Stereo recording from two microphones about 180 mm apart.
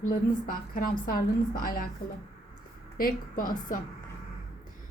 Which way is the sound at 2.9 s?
50° left (ahead or behind).